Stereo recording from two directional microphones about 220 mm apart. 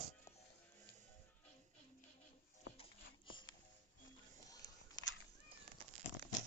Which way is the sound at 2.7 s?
25° left (ahead or behind).